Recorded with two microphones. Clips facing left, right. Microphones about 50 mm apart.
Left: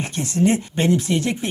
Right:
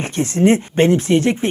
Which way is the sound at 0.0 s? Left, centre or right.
Right.